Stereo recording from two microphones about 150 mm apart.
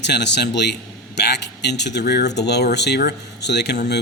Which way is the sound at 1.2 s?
90° left.